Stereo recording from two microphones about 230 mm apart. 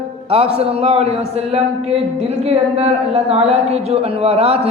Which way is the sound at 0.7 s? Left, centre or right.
Right.